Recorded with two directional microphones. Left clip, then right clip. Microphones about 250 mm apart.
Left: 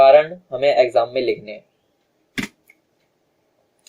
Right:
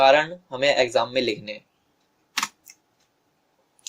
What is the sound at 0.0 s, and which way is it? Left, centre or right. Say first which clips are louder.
Speech: left 6 dB; right.